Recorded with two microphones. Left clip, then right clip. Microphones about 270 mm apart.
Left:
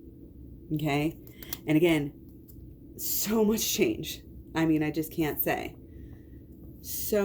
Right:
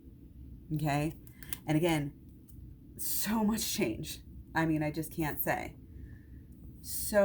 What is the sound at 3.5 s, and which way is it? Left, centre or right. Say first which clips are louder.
Speech: left 7 dB; right.